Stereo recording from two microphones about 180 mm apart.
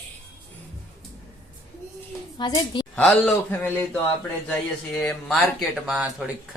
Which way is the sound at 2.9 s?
5° left (ahead or behind).